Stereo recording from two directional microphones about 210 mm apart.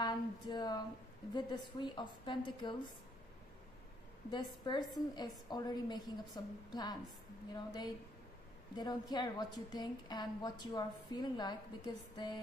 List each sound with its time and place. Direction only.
0.0 s a woman's voice: 20° left (ahead or behind)
4.3 s a woman's voice: 20° left (ahead or behind)